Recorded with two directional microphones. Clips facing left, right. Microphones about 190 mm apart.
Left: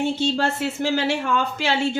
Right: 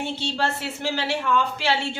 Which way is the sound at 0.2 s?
45° left (ahead or behind).